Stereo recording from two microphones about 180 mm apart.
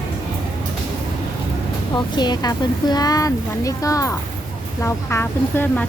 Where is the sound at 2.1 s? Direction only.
25° left (ahead or behind).